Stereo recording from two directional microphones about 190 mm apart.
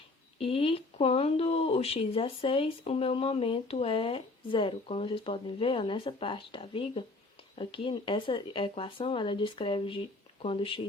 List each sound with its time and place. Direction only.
0.3 s speech: 30° left (ahead or behind)